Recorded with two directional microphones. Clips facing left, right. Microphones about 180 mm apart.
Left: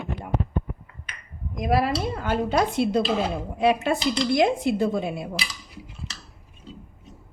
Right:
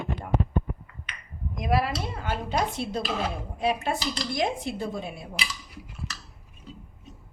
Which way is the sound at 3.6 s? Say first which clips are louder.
Left 6 dB; 80° left.